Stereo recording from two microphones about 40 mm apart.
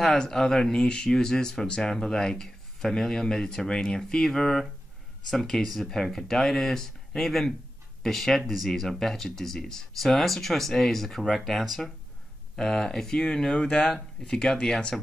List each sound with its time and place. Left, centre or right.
0.0 s speech: centre
4.3 s speech: centre
11.6 s speech: centre
12.5 s speech: centre